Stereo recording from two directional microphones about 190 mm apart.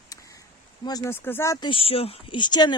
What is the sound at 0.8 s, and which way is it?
Speech, 20° left (ahead or behind).